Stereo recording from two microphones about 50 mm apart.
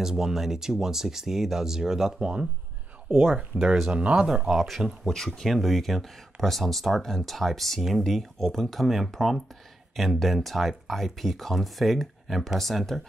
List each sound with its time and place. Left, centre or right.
0.0 s speech: centre
3.5 s speech: centre
3.9 s speech: right; by 4.8 s centre
5.1 s speech: centre